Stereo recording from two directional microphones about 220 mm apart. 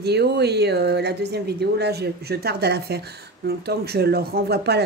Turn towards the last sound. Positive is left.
turn(degrees=-45)  # may be behind; listen again after turning